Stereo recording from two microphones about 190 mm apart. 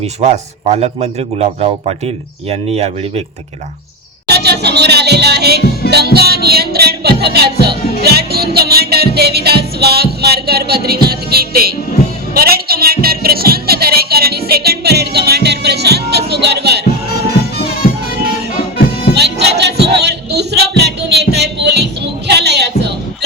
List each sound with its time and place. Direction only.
0.0 s a man's voice: 35° right (ahead or behind)
4.3 s music: 60° right (ahead or behind)
19.1 s a sound: 60° right (ahead or behind)